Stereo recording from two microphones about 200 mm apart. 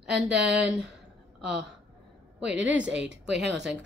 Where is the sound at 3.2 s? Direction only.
60° right (ahead or behind).